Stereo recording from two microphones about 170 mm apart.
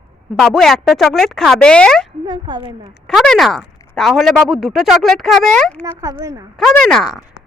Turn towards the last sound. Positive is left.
turn(degrees=0)  # may be behind; listen again after turning